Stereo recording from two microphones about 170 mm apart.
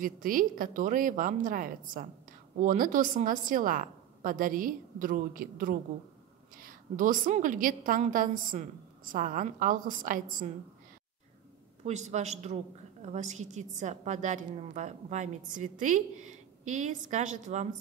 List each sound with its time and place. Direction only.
0.0 s a woman's voice: 55° right (ahead or behind)
11.8 s a man's voice: 40° right (ahead or behind)